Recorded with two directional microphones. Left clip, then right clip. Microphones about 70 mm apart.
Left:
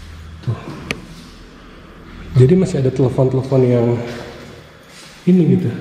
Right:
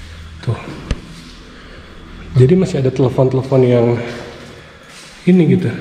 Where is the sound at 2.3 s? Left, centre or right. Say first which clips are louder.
Right 1 dB; centre.